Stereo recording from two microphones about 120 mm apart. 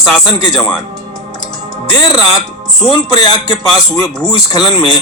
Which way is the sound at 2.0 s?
35° left (ahead or behind).